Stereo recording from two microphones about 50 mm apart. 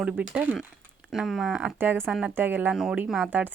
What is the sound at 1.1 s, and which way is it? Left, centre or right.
Speech, centre.